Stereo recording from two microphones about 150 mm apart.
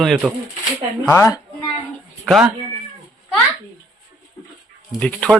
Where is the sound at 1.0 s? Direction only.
15° left (ahead or behind).